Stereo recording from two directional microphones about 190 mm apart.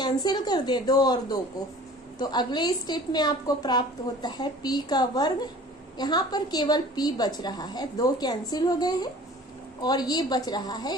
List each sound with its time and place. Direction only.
0.0 s a woman's voice: 20° left (ahead or behind)